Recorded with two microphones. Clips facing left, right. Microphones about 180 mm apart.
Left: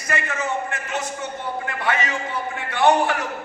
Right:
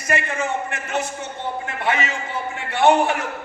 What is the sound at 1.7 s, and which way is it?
A man's voice, 25° right (ahead or behind).